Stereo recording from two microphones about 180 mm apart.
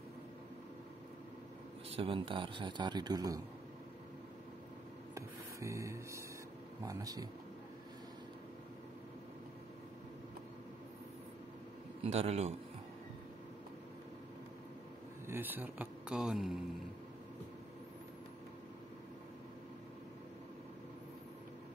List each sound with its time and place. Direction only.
1.9 s speech: 30° right (ahead or behind)
5.1 s rub: 15° right (ahead or behind)
6.8 s speech: 20° right (ahead or behind)
12.0 s a man's voice: 35° right (ahead or behind)
15.2 s speech: 10° right (ahead or behind)